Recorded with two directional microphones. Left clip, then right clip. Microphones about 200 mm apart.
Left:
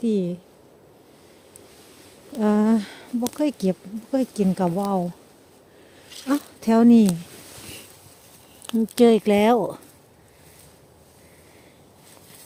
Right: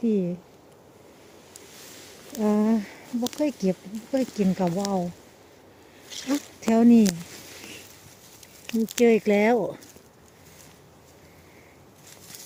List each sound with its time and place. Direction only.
0.0 s speech: 15° left (ahead or behind)
2.4 s speech: 20° left (ahead or behind)
6.2 s speech: 30° left (ahead or behind)
9.0 s speech: 20° left (ahead or behind)